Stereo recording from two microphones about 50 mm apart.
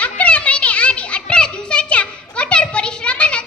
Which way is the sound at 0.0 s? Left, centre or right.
Left.